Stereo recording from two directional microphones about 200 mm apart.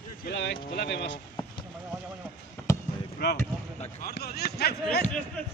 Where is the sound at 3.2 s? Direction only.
50° left (ahead or behind).